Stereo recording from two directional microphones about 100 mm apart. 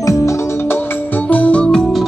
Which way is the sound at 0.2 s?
25° left (ahead or behind).